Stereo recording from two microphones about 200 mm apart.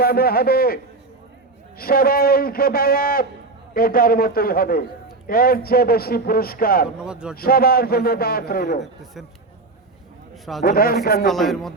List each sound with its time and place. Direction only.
0.0 s a man's voice: 50° left (ahead or behind)
1.8 s a man's voice: 50° left (ahead or behind)
7.0 s speech: 5° right (ahead or behind)
7.3 s a man's voice: 50° left (ahead or behind)
8.8 s speech: centre (ahead or behind)
10.6 s a man's voice: 50° left (ahead or behind)
11.3 s speech: centre (ahead or behind)